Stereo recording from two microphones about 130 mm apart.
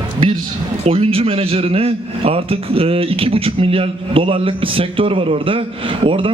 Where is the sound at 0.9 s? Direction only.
50° right (ahead or behind).